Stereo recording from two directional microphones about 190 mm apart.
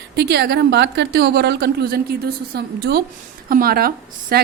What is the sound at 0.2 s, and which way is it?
A woman's voice, 60° right (ahead or behind).